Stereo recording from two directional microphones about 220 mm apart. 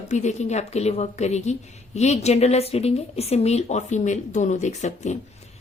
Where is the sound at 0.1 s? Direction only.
30° left (ahead or behind).